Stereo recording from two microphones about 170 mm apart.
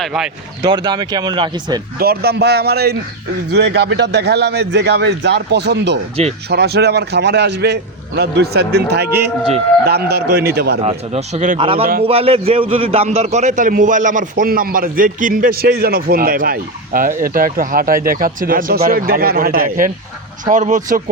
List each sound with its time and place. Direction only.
0.0 s speech: 5° right (ahead or behind)
0.6 s speech: 25° right (ahead or behind)
2.0 s a man's voice: 65° right (ahead or behind); by 6.0 s 90° right
6.5 s a man's voice: 70° right (ahead or behind)
10.8 s speech: 40° right (ahead or behind)
11.6 s a man's voice: 35° right (ahead or behind)